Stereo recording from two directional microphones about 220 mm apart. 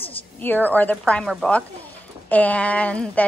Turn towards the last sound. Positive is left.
turn(degrees=5)  # may be behind; listen again after turning